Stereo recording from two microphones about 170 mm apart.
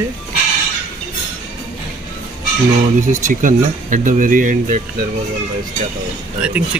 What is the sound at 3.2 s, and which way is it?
Speech, 50° right (ahead or behind).